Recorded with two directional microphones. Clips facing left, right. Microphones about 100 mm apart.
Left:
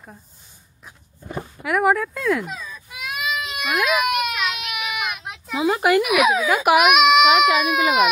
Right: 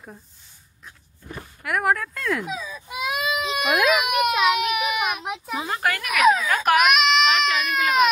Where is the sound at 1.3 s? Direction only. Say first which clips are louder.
Left 7 dB; 15° left (ahead or behind).